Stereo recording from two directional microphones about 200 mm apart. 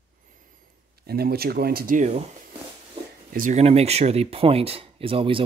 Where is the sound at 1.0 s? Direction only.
50° right (ahead or behind).